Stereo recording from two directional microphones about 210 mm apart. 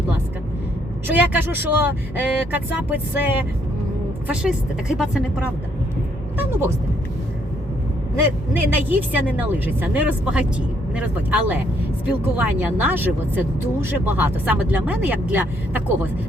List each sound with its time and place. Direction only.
1.0 s speech: 10° right (ahead or behind)
8.2 s speech: 10° right (ahead or behind)